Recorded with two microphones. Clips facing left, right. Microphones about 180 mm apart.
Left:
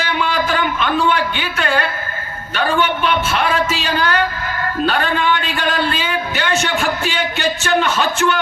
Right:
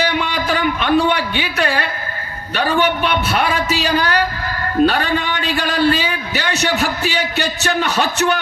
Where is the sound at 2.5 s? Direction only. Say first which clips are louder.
Right 1 dB; 40° right (ahead or behind).